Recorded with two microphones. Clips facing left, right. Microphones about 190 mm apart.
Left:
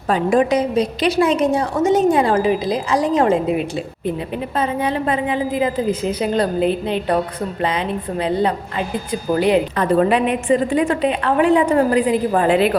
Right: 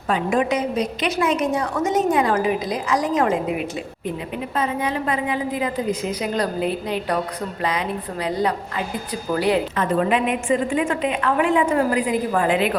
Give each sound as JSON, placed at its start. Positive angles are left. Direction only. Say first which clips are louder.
{"t": 0.1, "sound": "a woman's voice", "louder": "left 5 dB", "side_deg": 35}
{"t": 8.2, "sound": "a woman's voice", "louder": "left 4 dB", "side_deg": 25}
{"t": 9.7, "sound": "a woman's voice", "louder": "left 4 dB", "side_deg": 35}